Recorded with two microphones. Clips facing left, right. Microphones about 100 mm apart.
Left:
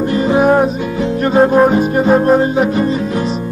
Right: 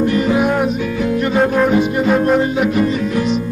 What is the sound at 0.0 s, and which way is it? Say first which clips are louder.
Music: left 2 dB; 30° left (ahead or behind).